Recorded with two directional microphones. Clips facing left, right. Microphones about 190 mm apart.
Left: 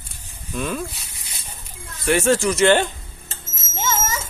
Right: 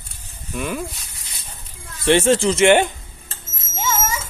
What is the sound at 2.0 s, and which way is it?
Speech, 25° right (ahead or behind).